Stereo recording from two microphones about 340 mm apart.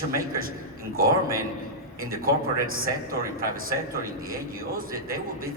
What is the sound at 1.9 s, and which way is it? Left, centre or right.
A man's voice, right.